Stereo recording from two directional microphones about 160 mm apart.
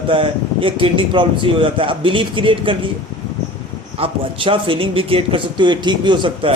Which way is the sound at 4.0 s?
35° right (ahead or behind).